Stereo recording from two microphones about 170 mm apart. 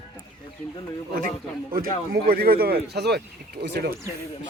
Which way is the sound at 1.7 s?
60° right (ahead or behind).